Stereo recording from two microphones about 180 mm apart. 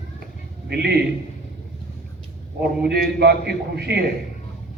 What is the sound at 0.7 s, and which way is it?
Speech, 60° right (ahead or behind).